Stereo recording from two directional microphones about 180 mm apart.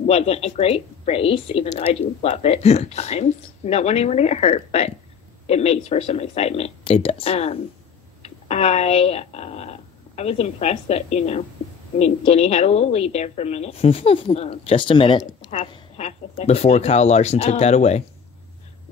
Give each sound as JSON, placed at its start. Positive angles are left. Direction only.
{"t": 0.0, "sound": "speech", "side_deg": 35}
{"t": 15.2, "sound": "a woman's voice", "side_deg": 45}